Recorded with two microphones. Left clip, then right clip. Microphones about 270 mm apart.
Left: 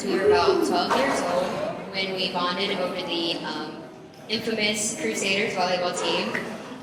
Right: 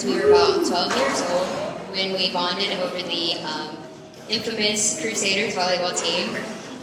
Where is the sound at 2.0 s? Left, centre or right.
Left.